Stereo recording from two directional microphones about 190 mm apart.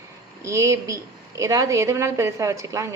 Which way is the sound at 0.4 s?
15° right (ahead or behind).